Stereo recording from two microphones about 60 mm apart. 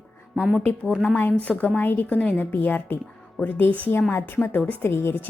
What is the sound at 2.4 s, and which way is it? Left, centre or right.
A woman's voice, left.